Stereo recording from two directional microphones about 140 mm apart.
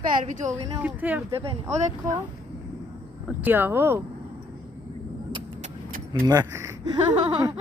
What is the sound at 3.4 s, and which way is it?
Speech, 15° right (ahead or behind).